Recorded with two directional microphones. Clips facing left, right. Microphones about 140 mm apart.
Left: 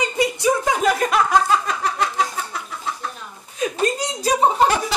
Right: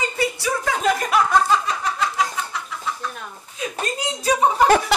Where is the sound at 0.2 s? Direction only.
20° left (ahead or behind).